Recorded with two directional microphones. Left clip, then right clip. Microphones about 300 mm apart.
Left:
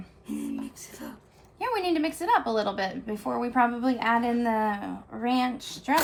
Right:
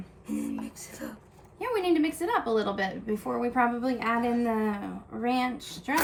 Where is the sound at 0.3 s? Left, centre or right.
Centre.